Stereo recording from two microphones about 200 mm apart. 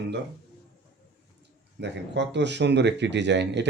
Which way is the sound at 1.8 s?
60° right (ahead or behind).